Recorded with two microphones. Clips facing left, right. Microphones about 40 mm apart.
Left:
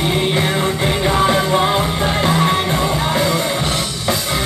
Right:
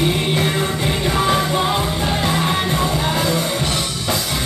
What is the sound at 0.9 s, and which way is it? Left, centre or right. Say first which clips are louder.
Music: left 3 dB; left.